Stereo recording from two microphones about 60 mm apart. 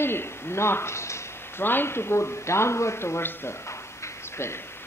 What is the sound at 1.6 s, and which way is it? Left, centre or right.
A man's voice, left.